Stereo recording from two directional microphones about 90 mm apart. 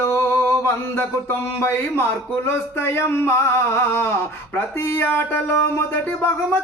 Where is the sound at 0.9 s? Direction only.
25° left (ahead or behind).